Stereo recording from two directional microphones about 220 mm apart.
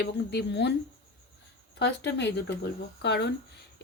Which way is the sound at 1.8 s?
50° left (ahead or behind).